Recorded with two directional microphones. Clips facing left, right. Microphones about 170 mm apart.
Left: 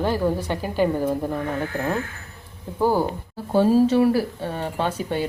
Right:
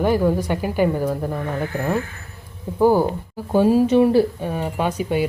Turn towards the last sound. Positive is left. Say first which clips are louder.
# right 3 dB
turn(degrees=-10)  # may be behind; listen again after turning